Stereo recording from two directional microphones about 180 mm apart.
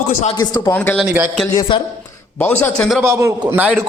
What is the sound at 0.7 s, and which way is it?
Speech, 10° left (ahead or behind).